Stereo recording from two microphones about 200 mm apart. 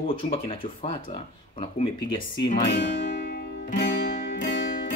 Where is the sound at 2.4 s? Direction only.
25° left (ahead or behind).